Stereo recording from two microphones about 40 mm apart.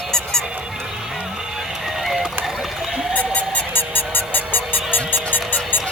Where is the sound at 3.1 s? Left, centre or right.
Left.